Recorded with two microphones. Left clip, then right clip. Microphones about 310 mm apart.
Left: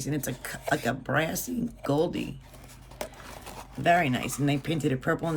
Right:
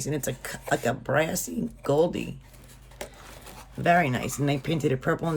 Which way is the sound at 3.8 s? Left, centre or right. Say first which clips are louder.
Right 1 dB; centre.